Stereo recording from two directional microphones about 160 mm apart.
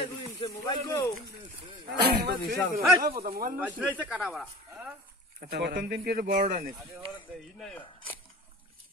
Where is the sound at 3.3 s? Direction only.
65° right (ahead or behind).